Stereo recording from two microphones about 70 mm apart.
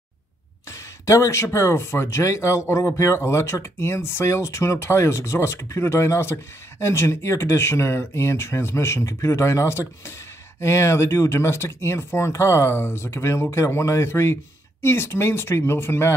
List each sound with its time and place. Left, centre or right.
0.7 s speech: left